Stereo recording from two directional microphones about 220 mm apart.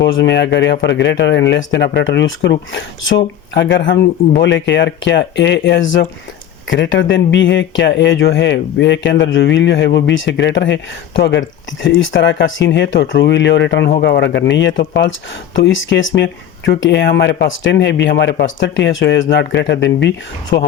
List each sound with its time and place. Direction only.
0.0 s speech: 50° left (ahead or behind)
15.5 s speech: 60° left (ahead or behind)